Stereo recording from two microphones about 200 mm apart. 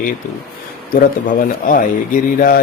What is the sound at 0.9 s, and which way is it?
A man's voice, 45° left (ahead or behind).